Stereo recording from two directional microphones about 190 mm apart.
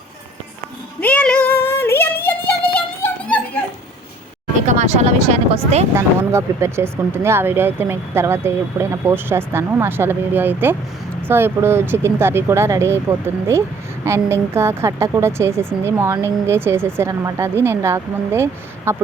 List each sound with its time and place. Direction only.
1.0 s female singing: 5° left (ahead or behind)
2.7 s music: 5° left (ahead or behind)
4.6 s speech: 40° right (ahead or behind)
5.9 s speech: 15° right (ahead or behind)